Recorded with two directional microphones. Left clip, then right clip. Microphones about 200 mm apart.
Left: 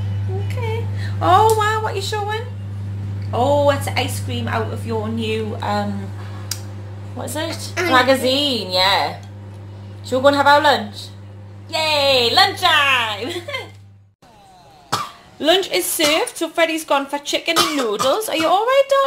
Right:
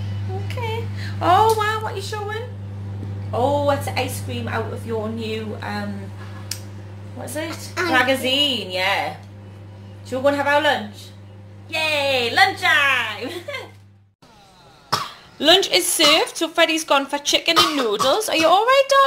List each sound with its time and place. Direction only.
0.5 s a sound: centre (ahead or behind)
1.0 s a sound: 10° left (ahead or behind)
1.9 s a woman's voice: 30° left (ahead or behind)
7.3 s a woman's voice: 5° left (ahead or behind)
7.9 s a woman's voice: 25° left (ahead or behind)
8.2 s a woman's voice: centre (ahead or behind)
8.6 s a woman's voice: 25° left (ahead or behind)
10.0 s a woman's voice: centre (ahead or behind)
11.7 s a woman's voice: 10° left (ahead or behind)
15.3 s a woman's voice: centre (ahead or behind)